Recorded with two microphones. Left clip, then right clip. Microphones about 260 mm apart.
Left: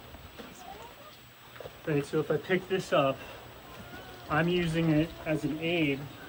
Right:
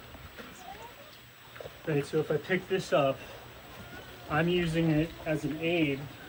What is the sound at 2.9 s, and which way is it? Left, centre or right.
Speech, left.